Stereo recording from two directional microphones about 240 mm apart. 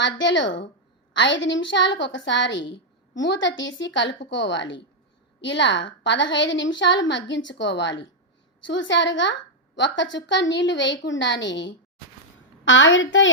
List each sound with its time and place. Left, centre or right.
0.0 s a woman's voice: left